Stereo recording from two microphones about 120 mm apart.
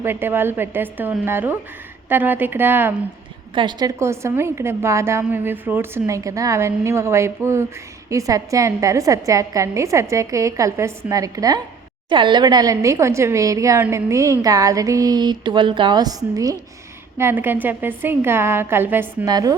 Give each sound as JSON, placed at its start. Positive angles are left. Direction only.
{"t": 0.0, "sound": "a woman's voice", "side_deg": -20}
{"t": 3.5, "sound": "a woman's voice", "side_deg": -40}
{"t": 4.0, "sound": "a woman's voice", "side_deg": -25}
{"t": 12.0, "sound": "a woman's voice", "side_deg": -40}
{"t": 17.2, "sound": "a woman's voice", "side_deg": -20}
{"t": 19.2, "sound": "a woman's voice", "side_deg": -30}